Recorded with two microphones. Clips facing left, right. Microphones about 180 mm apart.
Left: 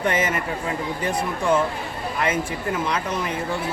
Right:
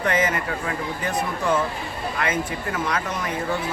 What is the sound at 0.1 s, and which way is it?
Speech, 30° left (ahead or behind).